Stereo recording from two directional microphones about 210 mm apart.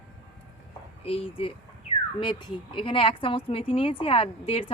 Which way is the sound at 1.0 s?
25° left (ahead or behind).